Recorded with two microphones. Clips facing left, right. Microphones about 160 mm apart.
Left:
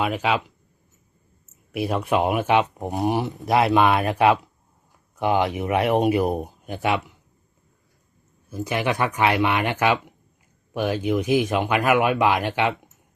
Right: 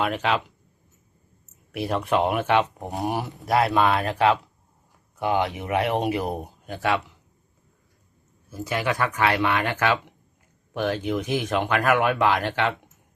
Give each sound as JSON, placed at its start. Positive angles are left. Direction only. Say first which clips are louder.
{"t": 0.0, "sound": "speech", "louder": "left 1 dB", "side_deg": 5}
{"t": 1.7, "sound": "speech", "louder": "left 1 dB", "side_deg": 5}
{"t": 8.4, "sound": "speech", "louder": "left 2 dB", "side_deg": 20}